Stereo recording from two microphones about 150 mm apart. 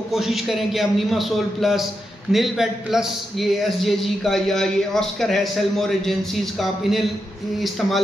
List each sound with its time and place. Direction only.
0.1 s a man's voice: centre (ahead or behind)